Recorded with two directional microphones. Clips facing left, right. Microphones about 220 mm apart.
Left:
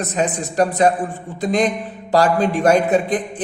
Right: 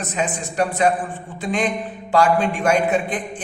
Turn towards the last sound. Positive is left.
turn(degrees=35)  # may be behind; listen again after turning